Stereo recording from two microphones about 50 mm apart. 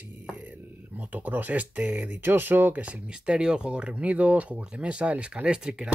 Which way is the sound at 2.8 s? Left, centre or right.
Right.